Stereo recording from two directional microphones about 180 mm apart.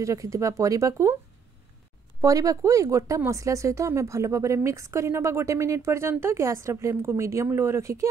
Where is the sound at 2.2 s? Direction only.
20° right (ahead or behind).